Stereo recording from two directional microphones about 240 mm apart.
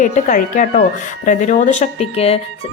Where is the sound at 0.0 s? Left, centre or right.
Left.